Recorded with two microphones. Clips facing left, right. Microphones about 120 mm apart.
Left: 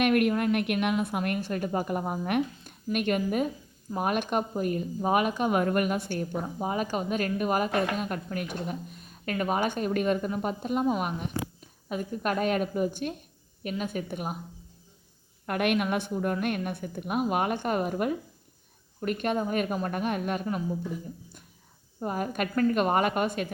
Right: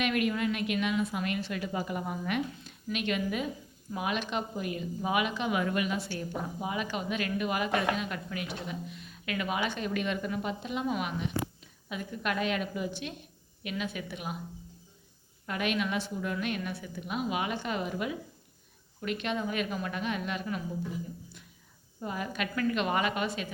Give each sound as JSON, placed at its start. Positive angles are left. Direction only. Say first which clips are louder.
{"t": 0.0, "sound": "speech", "louder": "left 5 dB", "side_deg": 55}
{"t": 15.4, "sound": "a woman's voice", "louder": "left 5 dB", "side_deg": 55}
{"t": 22.0, "sound": "speech", "louder": "left 5 dB", "side_deg": 45}